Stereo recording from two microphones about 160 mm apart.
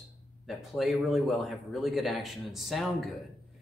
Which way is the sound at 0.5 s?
Centre (ahead or behind).